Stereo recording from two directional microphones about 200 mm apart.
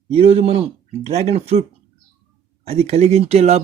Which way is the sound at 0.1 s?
30° right (ahead or behind).